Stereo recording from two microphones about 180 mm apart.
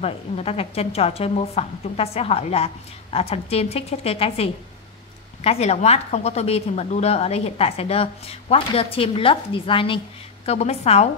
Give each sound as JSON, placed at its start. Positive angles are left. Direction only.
{"t": 0.0, "sound": "a woman's voice", "side_deg": 35}